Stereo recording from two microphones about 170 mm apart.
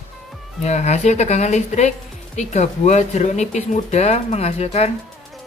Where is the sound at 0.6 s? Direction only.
40° left (ahead or behind).